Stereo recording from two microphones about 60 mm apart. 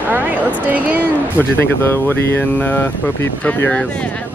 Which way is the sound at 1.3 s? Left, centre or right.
Left.